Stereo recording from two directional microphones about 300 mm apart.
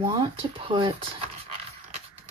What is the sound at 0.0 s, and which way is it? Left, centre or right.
Speech, centre.